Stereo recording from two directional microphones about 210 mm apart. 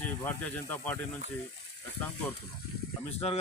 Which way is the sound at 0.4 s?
5° left (ahead or behind).